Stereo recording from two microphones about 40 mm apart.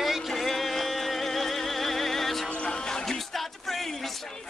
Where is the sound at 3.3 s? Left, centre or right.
Centre.